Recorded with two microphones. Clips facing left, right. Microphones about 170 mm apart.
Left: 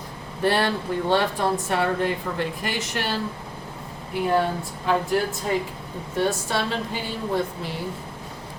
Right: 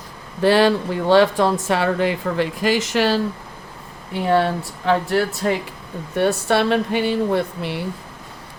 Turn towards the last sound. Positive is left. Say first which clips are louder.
# right 4 dB
turn(degrees=-70)  # may be behind; listen again after turning